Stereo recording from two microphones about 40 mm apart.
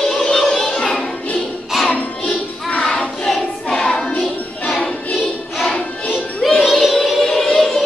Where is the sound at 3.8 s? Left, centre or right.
Left.